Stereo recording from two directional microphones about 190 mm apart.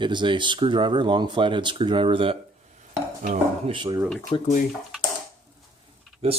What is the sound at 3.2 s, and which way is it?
Speech, 40° right (ahead or behind).